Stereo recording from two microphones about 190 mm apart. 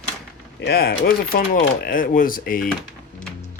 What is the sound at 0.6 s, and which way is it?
Speech, 55° left (ahead or behind).